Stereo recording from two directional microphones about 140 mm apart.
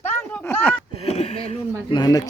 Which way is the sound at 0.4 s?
15° left (ahead or behind).